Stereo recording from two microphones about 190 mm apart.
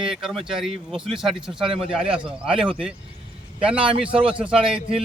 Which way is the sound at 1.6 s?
30° right (ahead or behind).